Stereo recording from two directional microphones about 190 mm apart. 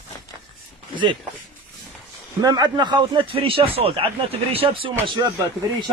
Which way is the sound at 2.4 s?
20° right (ahead or behind).